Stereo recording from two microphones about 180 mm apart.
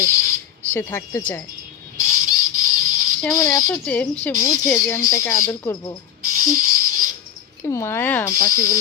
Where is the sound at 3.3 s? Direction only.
20° left (ahead or behind).